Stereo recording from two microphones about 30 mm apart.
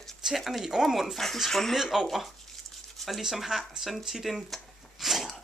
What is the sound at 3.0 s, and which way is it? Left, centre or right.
Speech, centre.